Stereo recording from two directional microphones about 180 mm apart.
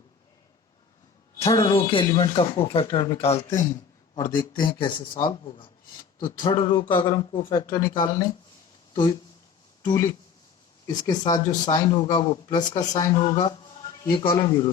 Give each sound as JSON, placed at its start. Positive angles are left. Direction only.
{"t": 1.4, "sound": "speech", "side_deg": 20}
{"t": 3.5, "sound": "a man's voice", "side_deg": 15}
{"t": 9.8, "sound": "speech", "side_deg": 20}